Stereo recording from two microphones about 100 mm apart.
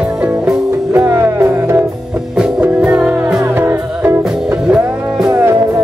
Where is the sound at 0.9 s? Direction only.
25° right (ahead or behind).